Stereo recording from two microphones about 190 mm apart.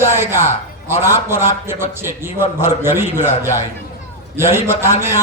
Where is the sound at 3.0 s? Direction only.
35° left (ahead or behind).